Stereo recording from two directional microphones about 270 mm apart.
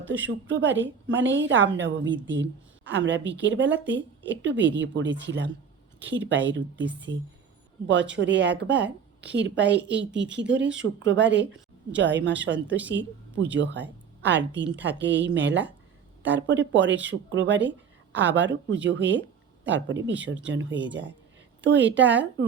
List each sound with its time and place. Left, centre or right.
0.1 s a woman's voice: right